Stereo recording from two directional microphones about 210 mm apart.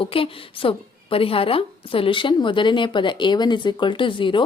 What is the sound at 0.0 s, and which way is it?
A woman's voice, 25° left (ahead or behind).